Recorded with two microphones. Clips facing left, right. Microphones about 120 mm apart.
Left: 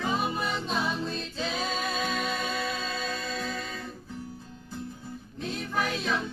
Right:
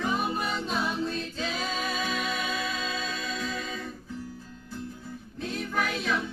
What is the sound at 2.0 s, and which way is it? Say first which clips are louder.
Music: left 1 dB; 50° left (ahead or behind).